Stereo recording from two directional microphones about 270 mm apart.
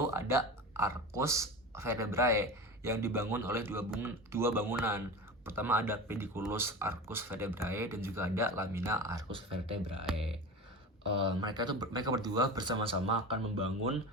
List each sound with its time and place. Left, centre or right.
0.1 s speech: centre
10.1 s speech: centre
11.2 s speech: centre